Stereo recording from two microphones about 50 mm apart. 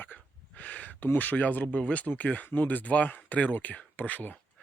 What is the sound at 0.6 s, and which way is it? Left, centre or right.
Speech, left.